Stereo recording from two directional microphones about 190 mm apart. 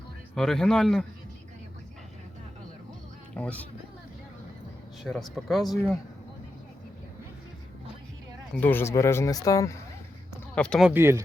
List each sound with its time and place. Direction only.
0.3 s a man's voice: centre (ahead or behind)
3.3 s speech: 10° left (ahead or behind)
5.3 s a man's voice: centre (ahead or behind)
8.6 s speech: 10° left (ahead or behind)
10.3 s a sound: 5° left (ahead or behind)
10.9 s speech: 10° right (ahead or behind)